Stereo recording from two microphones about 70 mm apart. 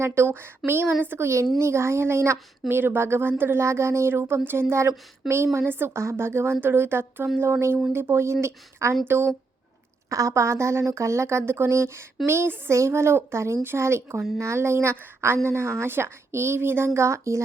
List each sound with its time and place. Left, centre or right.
0.0 s speech: right
10.1 s speech: right